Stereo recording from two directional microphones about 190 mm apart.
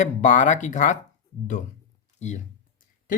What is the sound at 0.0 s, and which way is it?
Speech, 40° left (ahead or behind).